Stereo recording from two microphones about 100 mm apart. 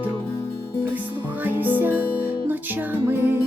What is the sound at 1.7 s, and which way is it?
Music, 20° right (ahead or behind).